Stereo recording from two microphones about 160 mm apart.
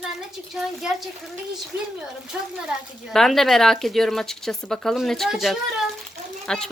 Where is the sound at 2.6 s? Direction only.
Centre (ahead or behind).